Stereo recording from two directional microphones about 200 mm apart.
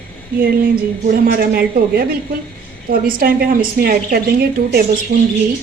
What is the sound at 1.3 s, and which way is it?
A woman's voice, 50° right (ahead or behind).